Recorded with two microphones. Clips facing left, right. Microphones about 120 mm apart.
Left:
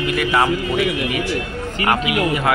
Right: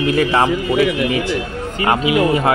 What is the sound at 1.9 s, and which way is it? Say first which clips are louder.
Speech: right 4 dB; 25° right (ahead or behind).